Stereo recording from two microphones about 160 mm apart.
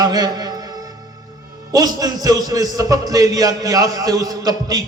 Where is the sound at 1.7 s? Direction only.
25° right (ahead or behind).